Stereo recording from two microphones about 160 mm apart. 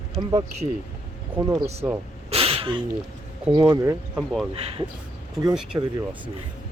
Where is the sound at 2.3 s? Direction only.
35° right (ahead or behind).